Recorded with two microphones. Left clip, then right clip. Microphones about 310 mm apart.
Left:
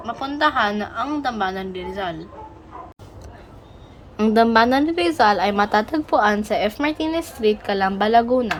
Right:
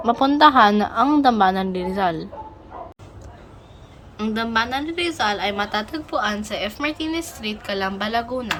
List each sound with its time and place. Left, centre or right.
0.0 s a woman's voice: centre
4.2 s a woman's voice: centre